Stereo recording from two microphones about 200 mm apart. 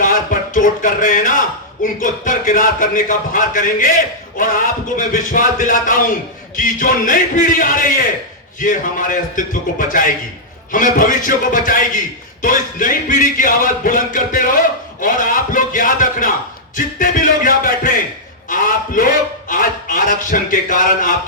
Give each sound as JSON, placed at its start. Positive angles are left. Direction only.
{"t": 0.0, "sound": "a man's voice", "side_deg": 40}